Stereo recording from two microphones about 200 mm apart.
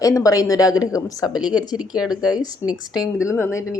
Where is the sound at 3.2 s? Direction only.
15° left (ahead or behind).